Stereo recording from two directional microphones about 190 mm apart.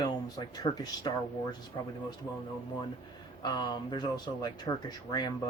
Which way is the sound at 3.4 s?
25° left (ahead or behind).